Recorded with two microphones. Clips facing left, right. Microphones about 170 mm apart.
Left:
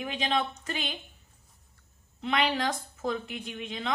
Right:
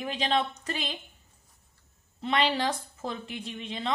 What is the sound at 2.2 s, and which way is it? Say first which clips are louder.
A woman's voice: right 1 dB; 30° right (ahead or behind).